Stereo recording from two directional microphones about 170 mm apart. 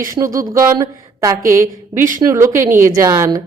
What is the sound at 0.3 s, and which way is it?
A woman's voice, 20° right (ahead or behind).